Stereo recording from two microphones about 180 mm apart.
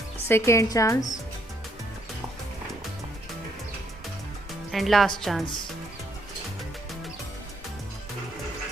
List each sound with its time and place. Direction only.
0.3 s a woman's voice: 15° left (ahead or behind)
4.7 s a woman's voice: centre (ahead or behind)